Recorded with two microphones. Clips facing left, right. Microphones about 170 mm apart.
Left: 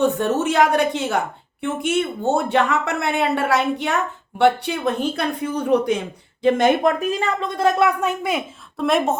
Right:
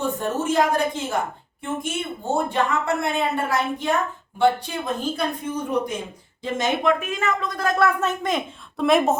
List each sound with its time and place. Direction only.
0.0 s speech: 75° left (ahead or behind)
6.4 s speech: 55° left (ahead or behind)
7.0 s a woman's voice: 35° left (ahead or behind); by 9.1 s centre (ahead or behind)